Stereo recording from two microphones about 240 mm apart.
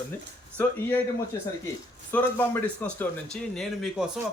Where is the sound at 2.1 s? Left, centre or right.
Centre.